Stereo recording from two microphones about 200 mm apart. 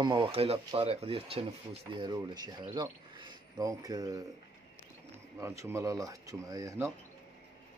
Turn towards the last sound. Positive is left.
turn(degrees=-15)  # may be behind; listen again after turning